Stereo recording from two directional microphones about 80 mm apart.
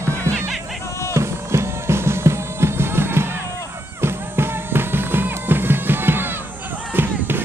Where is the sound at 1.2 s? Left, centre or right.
Right.